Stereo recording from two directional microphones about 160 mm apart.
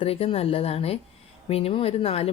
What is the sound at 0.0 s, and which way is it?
Speech, 35° left (ahead or behind).